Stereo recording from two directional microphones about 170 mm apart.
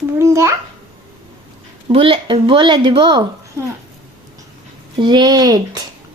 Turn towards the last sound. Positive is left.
turn(degrees=-20)  # may be behind; listen again after turning